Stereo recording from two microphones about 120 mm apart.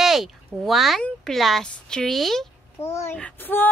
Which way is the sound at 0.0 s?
Centre (ahead or behind).